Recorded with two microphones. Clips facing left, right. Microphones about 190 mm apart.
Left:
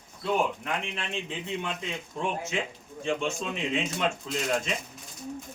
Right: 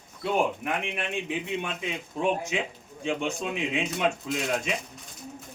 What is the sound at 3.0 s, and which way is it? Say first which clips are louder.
Speech: even; 15° right (ahead or behind).